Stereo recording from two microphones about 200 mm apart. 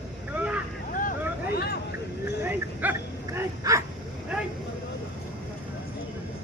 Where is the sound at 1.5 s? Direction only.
50° left (ahead or behind).